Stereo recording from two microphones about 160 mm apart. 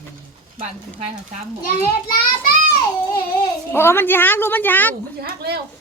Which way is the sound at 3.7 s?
15° left (ahead or behind).